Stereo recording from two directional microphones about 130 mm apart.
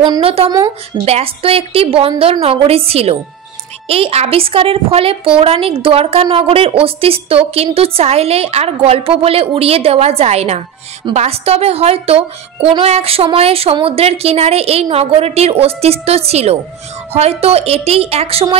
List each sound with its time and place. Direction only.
0.2 s a woman's voice: 50° right (ahead or behind)